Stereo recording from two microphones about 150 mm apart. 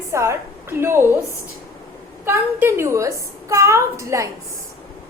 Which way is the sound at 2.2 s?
15° right (ahead or behind).